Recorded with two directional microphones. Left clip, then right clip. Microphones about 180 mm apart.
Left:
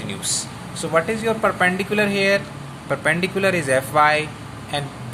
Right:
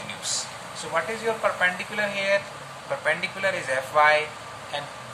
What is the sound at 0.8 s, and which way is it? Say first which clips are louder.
Speech: left 7 dB; 55° left (ahead or behind).